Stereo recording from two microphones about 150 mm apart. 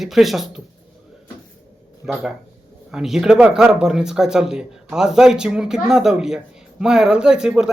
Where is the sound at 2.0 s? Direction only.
Centre (ahead or behind).